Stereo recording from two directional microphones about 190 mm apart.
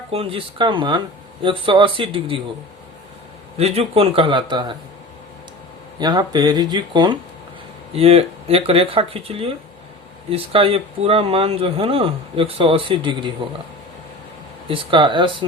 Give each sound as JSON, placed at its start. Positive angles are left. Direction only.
{"t": 0.1, "sound": "speech", "side_deg": -30}
{"t": 3.6, "sound": "speech", "side_deg": -30}
{"t": 6.0, "sound": "speech", "side_deg": -20}
{"t": 14.7, "sound": "speech", "side_deg": -25}